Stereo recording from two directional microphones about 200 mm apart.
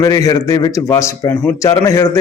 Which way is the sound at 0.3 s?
15° left (ahead or behind).